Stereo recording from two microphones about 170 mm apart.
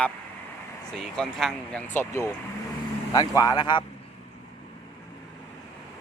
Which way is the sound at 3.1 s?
20° left (ahead or behind).